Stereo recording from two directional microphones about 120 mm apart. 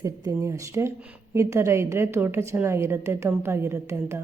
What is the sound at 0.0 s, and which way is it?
A woman's voice, 25° right (ahead or behind).